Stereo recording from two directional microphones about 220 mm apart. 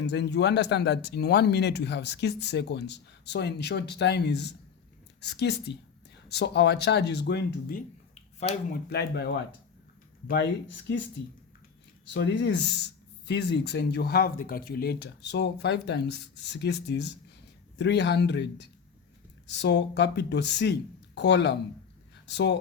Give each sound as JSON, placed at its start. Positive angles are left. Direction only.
{"t": 0.0, "sound": "speech", "side_deg": 50}
{"t": 12.1, "sound": "speech", "side_deg": 55}
{"t": 19.5, "sound": "speech", "side_deg": 50}
{"t": 22.1, "sound": "a sound", "side_deg": 50}